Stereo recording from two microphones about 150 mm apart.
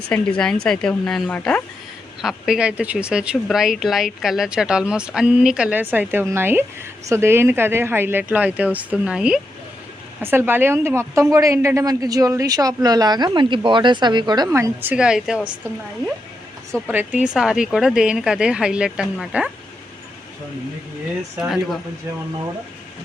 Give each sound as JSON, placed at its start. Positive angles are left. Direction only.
{"t": 0.1, "sound": "speech", "side_deg": 5}
{"t": 2.2, "sound": "a woman's voice", "side_deg": -5}
{"t": 16.9, "sound": "speech", "side_deg": -10}